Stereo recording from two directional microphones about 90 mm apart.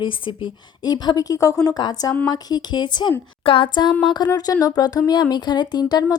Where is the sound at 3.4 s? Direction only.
75° left (ahead or behind); by 4.0 s 55° left (ahead or behind).